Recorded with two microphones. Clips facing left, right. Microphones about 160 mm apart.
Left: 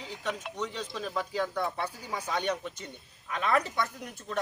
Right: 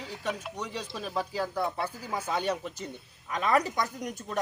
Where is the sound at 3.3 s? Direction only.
40° right (ahead or behind).